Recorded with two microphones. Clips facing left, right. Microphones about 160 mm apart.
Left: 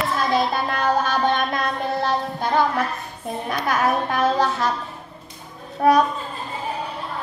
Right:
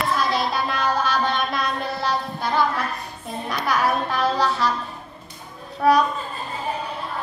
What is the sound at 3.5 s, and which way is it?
Child singing, 50° left (ahead or behind).